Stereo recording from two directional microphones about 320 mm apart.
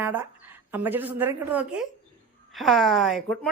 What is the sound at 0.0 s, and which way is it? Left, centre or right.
A woman's voice, centre.